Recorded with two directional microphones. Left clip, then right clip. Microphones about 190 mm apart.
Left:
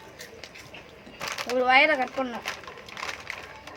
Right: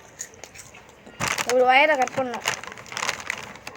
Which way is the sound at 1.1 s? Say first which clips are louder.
Right 7 dB; 45° right (ahead or behind).